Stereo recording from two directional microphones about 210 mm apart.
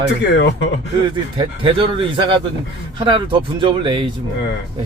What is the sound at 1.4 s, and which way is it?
Speech, 25° right (ahead or behind).